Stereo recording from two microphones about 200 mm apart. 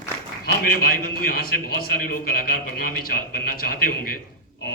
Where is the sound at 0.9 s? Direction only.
45° left (ahead or behind).